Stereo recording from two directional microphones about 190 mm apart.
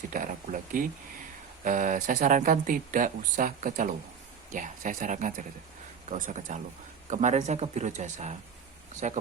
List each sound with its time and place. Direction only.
0.1 s speech: 45° right (ahead or behind)